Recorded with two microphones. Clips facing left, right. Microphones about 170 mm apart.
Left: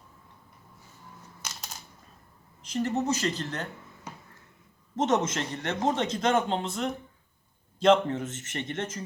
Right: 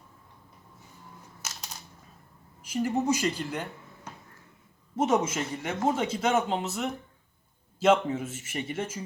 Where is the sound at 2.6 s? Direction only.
10° right (ahead or behind).